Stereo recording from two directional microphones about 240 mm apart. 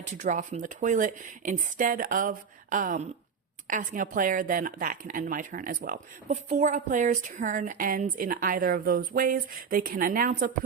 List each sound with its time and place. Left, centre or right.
0.0 s speech: right